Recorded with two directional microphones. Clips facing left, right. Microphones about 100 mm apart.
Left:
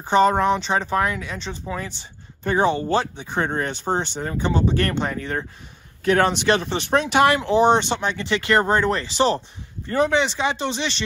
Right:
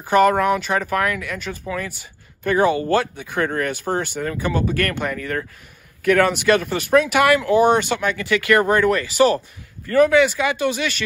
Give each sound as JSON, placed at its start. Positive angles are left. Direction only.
{"t": 0.1, "sound": "speech", "side_deg": 25}